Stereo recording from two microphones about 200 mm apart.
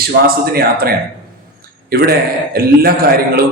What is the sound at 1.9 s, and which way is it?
A man's voice, 50° right (ahead or behind).